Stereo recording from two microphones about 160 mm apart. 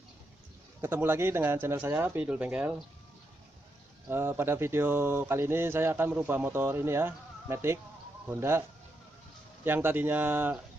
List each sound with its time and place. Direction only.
0.7 s speech: 15° right (ahead or behind)
4.1 s speech: 15° right (ahead or behind)
9.7 s speech: 15° right (ahead or behind)